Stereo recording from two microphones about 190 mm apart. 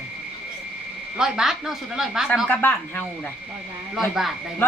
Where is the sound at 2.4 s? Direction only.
10° left (ahead or behind).